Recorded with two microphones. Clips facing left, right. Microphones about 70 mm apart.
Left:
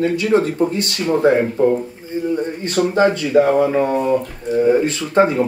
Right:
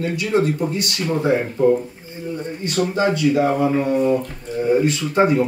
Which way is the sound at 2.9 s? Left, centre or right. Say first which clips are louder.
Left 4 dB; left.